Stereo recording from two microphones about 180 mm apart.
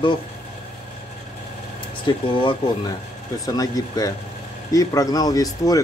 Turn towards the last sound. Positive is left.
turn(degrees=20)  # may be behind; listen again after turning